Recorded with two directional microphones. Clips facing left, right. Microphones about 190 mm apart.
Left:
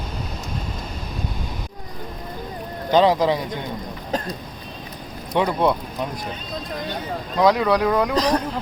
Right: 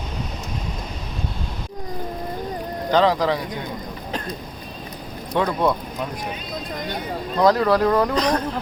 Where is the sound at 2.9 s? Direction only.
20° left (ahead or behind).